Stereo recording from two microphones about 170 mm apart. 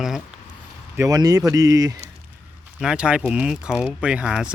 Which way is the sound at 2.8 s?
5° right (ahead or behind).